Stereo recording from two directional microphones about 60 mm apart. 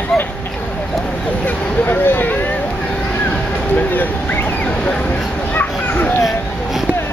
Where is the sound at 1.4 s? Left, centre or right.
Left.